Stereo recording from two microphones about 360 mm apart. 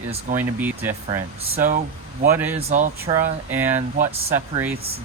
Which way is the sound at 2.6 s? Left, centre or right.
Centre.